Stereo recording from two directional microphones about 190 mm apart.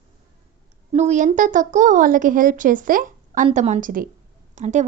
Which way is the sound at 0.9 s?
40° right (ahead or behind).